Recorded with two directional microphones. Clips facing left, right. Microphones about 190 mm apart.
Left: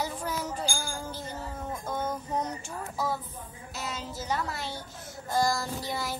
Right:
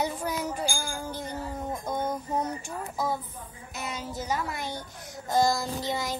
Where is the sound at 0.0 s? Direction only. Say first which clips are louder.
Right 3 dB; 15° right (ahead or behind).